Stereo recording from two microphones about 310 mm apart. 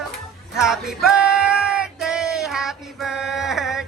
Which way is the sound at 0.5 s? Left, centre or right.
Centre.